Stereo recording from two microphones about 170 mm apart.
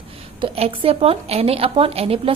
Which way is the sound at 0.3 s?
35° right (ahead or behind).